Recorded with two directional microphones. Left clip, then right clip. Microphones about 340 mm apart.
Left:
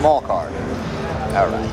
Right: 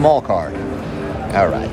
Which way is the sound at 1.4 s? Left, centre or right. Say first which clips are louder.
Right 3 dB; right.